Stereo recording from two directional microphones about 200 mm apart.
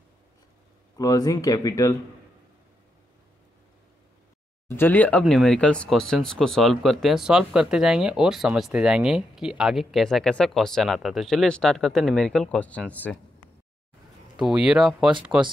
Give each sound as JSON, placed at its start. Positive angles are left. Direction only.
{"t": 0.9, "sound": "speech", "side_deg": 20}
{"t": 4.6, "sound": "speech", "side_deg": 10}
{"t": 14.4, "sound": "speech", "side_deg": -5}